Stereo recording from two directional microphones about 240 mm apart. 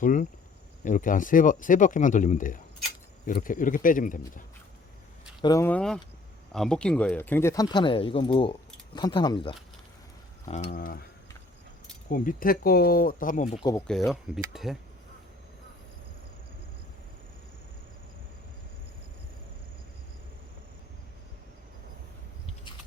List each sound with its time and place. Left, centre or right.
0.0 s speech: left
5.4 s speech: centre; by 11.0 s left
12.1 s speech: left
13.7 s speech: centre